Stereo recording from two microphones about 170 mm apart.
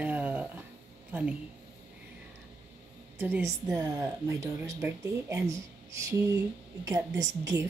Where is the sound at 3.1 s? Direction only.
10° right (ahead or behind).